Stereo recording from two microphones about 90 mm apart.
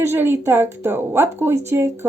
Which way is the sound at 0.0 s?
25° right (ahead or behind).